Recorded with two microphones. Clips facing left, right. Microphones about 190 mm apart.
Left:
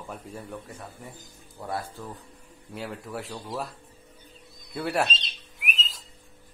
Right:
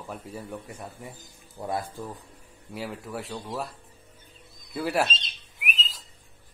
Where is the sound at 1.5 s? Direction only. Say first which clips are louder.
Right 2 dB; 15° right (ahead or behind).